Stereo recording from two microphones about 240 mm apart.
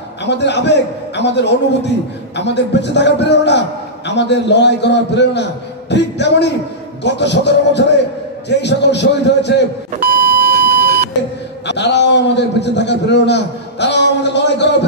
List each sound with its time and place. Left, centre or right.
0.2 s a man's voice: left
10.5 s beep: right
11.6 s a man's voice: left